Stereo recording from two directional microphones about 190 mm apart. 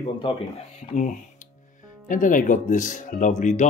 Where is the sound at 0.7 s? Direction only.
40° left (ahead or behind).